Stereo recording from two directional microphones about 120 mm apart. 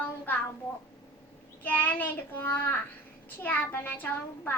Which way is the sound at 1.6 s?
15° left (ahead or behind).